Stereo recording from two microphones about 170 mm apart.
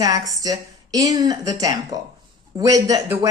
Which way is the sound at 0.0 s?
20° right (ahead or behind).